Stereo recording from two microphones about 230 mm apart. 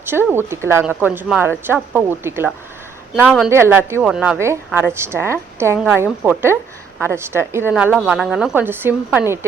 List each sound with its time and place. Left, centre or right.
0.0 s speech: centre